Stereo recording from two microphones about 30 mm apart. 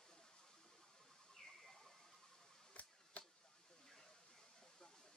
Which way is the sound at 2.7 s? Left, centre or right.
Left.